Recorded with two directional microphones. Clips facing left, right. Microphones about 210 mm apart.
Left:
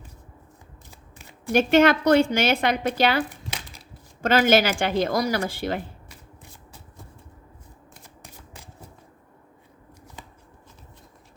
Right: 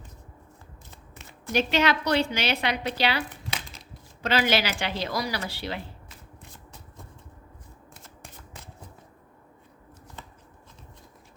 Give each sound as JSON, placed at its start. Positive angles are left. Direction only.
{"t": 1.5, "sound": "a woman's voice", "side_deg": 50}